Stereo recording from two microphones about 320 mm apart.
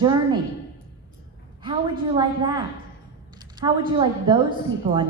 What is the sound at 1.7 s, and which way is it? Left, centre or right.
Speech, centre.